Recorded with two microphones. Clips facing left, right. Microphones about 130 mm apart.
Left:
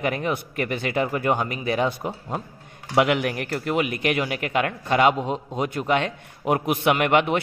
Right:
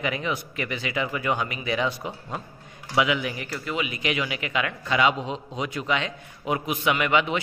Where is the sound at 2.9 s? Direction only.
60° left (ahead or behind).